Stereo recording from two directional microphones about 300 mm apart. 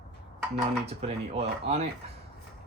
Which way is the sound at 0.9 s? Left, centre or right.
Right.